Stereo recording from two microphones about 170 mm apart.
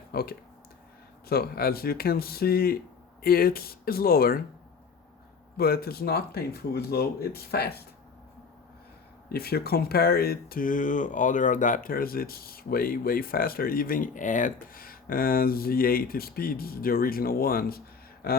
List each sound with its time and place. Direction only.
0.1 s speech: 65° left (ahead or behind)
5.5 s speech: 65° left (ahead or behind)
9.3 s speech: 65° left (ahead or behind)